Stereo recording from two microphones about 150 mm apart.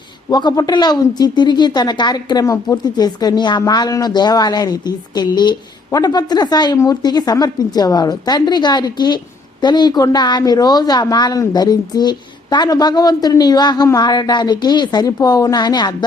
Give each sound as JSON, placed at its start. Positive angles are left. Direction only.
{"t": 0.3, "sound": "a woman's voice", "side_deg": 30}